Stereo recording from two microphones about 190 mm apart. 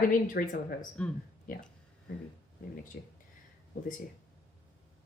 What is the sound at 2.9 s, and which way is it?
Speech, 50° left (ahead or behind).